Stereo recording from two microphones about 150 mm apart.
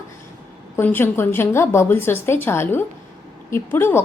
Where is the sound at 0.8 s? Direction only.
15° left (ahead or behind).